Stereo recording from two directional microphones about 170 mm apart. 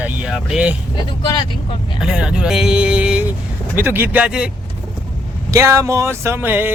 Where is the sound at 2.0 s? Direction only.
5° right (ahead or behind).